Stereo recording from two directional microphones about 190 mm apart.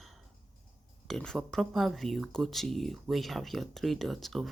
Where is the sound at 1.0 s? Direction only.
Centre (ahead or behind).